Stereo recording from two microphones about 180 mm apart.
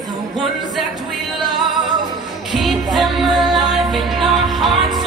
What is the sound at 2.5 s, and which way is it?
Music, centre (ahead or behind).